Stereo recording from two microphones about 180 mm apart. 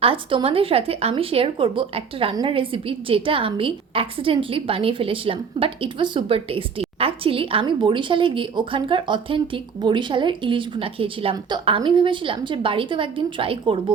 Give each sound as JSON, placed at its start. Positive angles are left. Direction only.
{"t": 0.0, "sound": "speech", "side_deg": -30}